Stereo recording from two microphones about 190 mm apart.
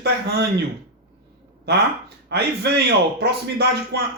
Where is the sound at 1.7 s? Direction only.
60° right (ahead or behind).